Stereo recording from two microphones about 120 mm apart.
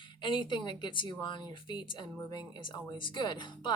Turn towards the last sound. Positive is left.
turn(degrees=40)  # may be behind; listen again after turning